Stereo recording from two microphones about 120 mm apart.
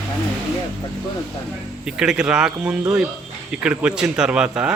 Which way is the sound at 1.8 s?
5° right (ahead or behind).